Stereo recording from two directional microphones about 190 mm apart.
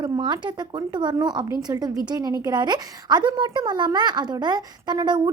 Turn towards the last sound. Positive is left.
turn(degrees=-25)  # may be behind; listen again after turning